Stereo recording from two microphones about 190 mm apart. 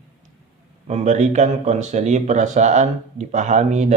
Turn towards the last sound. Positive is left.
turn(degrees=-35)  # may be behind; listen again after turning